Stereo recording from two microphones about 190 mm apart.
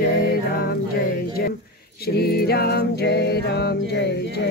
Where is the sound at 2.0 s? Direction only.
55° left (ahead or behind).